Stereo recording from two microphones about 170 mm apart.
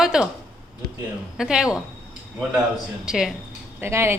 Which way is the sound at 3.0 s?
5° right (ahead or behind).